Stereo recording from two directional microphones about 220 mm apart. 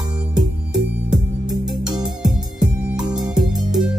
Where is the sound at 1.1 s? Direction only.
Centre (ahead or behind).